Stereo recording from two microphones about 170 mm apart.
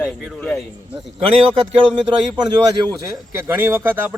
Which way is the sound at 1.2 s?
30° right (ahead or behind).